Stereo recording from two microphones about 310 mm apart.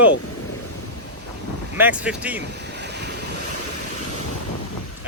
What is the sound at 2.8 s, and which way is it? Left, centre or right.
Waves, right.